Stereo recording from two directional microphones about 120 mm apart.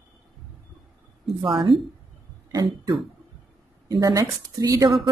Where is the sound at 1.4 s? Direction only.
45° right (ahead or behind).